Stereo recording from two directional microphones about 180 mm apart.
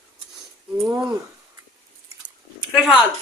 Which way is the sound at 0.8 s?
20° right (ahead or behind).